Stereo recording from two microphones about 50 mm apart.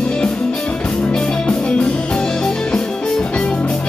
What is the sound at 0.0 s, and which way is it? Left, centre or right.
Music, centre.